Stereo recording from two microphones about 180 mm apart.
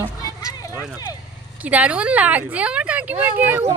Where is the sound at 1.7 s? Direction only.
5° right (ahead or behind).